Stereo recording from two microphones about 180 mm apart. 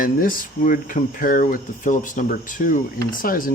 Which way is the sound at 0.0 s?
50° left (ahead or behind).